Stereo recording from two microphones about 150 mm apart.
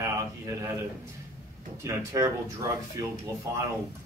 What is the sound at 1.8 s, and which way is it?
Speech, 20° right (ahead or behind).